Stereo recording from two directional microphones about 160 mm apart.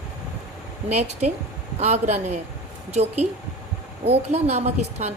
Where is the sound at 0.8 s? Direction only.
45° right (ahead or behind).